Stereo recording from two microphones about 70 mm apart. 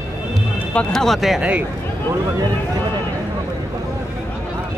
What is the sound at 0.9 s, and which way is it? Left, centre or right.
Speech, centre.